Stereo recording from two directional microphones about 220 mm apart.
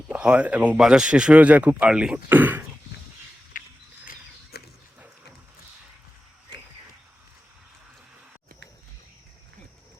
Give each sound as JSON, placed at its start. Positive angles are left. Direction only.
{"t": 0.1, "sound": "speech", "side_deg": -5}
{"t": 3.6, "sound": "mechanisms", "side_deg": 40}
{"t": 4.0, "sound": "a sound", "side_deg": 40}